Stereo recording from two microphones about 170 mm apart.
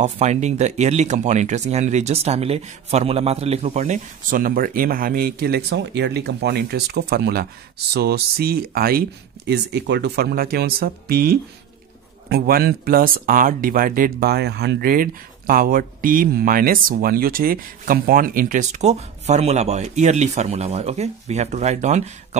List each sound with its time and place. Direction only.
0.0 s speech: 40° right (ahead or behind); by 9.0 s 60° right (ahead or behind)
9.5 s speech: 75° right (ahead or behind); by 22.4 s 45° right (ahead or behind)